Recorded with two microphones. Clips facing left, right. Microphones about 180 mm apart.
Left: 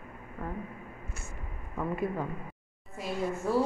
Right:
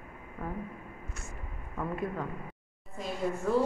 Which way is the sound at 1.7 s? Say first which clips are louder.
Left 2 dB; 5° left (ahead or behind).